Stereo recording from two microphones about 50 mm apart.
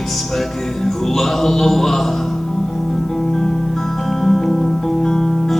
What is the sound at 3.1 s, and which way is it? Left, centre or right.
Music, centre.